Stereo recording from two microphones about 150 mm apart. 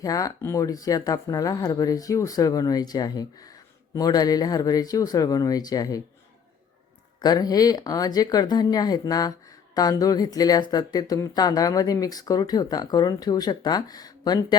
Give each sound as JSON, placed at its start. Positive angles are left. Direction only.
{"t": 0.0, "sound": "speech", "side_deg": 25}
{"t": 7.2, "sound": "speech", "side_deg": 25}